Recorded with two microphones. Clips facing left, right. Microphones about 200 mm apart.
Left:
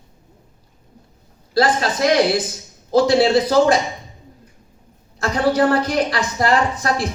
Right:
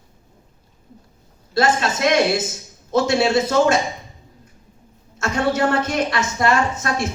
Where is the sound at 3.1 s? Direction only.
35° left (ahead or behind).